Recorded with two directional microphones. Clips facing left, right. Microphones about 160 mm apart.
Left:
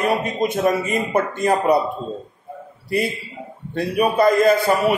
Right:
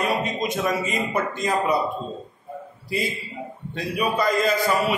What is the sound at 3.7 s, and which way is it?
A man's voice, 55° left (ahead or behind).